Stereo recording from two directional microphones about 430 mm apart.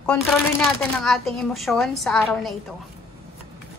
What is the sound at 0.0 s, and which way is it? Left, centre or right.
A woman's voice, centre.